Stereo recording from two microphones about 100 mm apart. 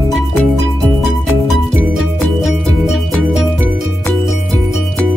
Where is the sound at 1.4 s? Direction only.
Centre (ahead or behind).